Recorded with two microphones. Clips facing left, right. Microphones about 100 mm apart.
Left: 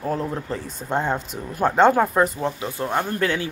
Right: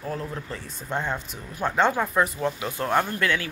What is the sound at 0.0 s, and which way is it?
Speech, 35° left (ahead or behind).